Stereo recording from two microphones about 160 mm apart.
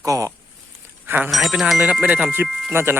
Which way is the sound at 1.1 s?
10° right (ahead or behind).